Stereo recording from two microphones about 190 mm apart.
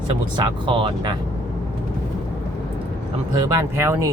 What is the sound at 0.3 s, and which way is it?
Speech, 25° right (ahead or behind).